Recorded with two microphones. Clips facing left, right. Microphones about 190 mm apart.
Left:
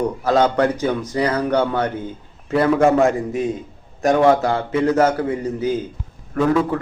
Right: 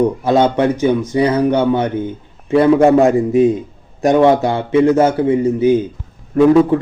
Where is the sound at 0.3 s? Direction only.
25° right (ahead or behind).